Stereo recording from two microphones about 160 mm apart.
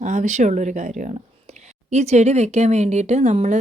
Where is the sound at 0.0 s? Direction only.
50° right (ahead or behind).